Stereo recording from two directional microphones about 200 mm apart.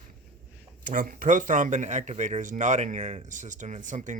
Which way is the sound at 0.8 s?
45° right (ahead or behind).